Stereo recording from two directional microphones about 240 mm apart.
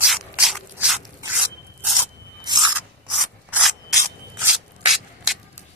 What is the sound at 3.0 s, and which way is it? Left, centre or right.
Rub, centre.